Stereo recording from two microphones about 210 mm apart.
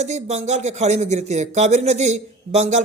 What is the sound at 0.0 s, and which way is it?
Speech, 30° right (ahead or behind).